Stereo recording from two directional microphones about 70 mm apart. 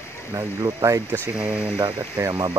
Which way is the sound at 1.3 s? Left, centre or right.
Centre.